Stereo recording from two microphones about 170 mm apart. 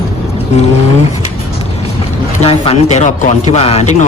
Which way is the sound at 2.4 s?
35° left (ahead or behind).